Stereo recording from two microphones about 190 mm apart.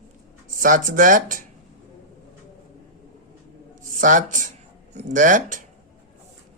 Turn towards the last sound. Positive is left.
turn(degrees=-45)  # may be behind; listen again after turning